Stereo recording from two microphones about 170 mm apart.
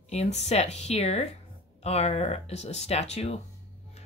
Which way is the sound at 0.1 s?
40° left (ahead or behind).